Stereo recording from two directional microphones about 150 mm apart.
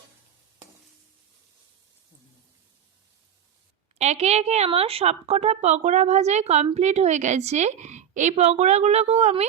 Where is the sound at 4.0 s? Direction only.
45° right (ahead or behind).